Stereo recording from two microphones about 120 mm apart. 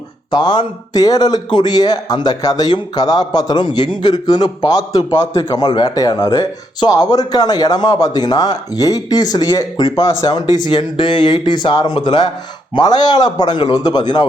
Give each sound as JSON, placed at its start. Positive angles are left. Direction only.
{"t": 0.3, "sound": "speech", "side_deg": 40}